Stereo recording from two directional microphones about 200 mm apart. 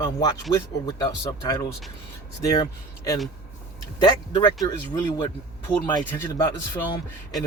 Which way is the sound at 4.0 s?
25° left (ahead or behind).